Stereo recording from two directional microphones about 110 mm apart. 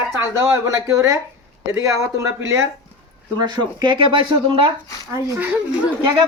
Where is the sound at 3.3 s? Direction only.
40° right (ahead or behind).